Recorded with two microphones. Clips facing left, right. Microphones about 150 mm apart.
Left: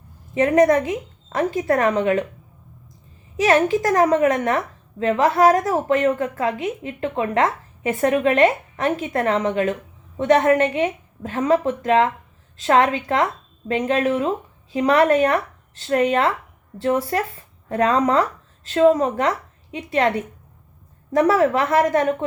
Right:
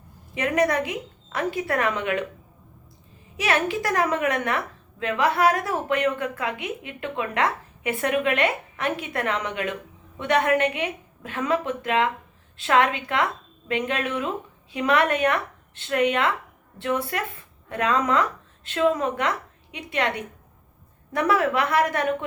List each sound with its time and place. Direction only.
0.3 s a woman's voice: 45° left (ahead or behind)
3.3 s a woman's voice: 45° left (ahead or behind)